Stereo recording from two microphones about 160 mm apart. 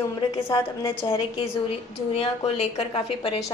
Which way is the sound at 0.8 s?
30° left (ahead or behind).